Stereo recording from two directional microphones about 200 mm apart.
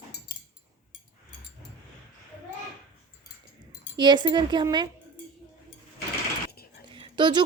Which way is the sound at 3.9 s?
20° right (ahead or behind).